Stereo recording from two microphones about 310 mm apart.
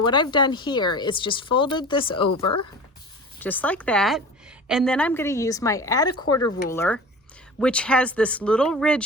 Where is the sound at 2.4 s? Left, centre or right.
Left.